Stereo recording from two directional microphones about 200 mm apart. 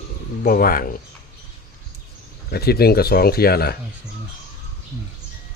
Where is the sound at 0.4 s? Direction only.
45° left (ahead or behind).